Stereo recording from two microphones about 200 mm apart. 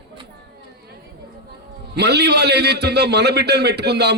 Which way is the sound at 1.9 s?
55° right (ahead or behind).